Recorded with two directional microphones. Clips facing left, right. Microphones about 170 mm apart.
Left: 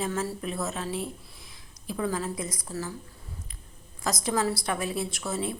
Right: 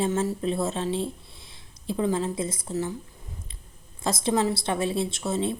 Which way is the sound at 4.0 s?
25° right (ahead or behind).